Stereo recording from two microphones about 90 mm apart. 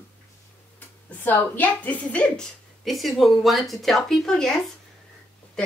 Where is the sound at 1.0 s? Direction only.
20° left (ahead or behind).